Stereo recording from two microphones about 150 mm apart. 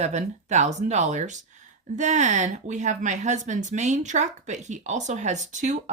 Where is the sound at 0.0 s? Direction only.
50° right (ahead or behind).